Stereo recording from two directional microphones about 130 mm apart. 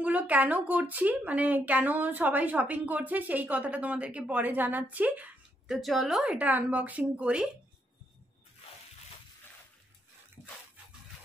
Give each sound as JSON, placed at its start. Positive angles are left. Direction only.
{"t": 0.0, "sound": "speech", "side_deg": -10}
{"t": 5.8, "sound": "speech", "side_deg": 0}
{"t": 10.4, "sound": "dog", "side_deg": 30}